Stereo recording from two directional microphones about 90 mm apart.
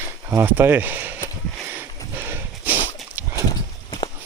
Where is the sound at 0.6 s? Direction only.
20° right (ahead or behind).